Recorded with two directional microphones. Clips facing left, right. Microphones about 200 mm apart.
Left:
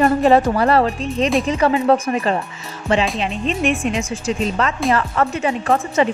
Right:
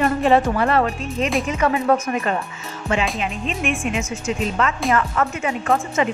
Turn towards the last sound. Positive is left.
turn(degrees=35)  # may be behind; listen again after turning